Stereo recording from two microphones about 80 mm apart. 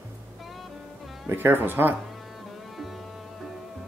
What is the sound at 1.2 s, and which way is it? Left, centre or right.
Speech, right.